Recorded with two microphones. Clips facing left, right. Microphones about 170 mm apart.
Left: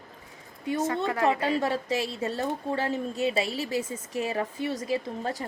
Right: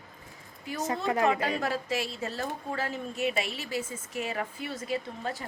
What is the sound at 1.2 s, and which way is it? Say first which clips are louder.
A woman's voice: left 5 dB; 35° left (ahead or behind).